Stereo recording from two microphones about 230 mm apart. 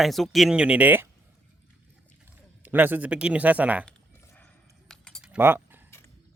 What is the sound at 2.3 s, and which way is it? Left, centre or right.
Speech, centre.